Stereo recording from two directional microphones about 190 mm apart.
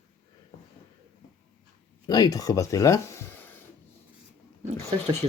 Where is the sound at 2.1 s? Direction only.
20° left (ahead or behind).